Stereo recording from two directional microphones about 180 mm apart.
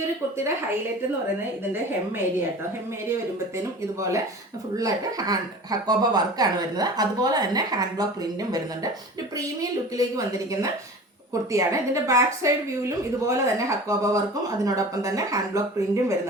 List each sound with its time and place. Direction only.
4.8 s speech: 20° right (ahead or behind)
9.6 s a woman's voice: 20° right (ahead or behind)